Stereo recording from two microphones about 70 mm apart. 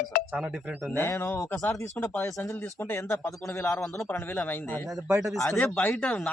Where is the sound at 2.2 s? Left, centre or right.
Left.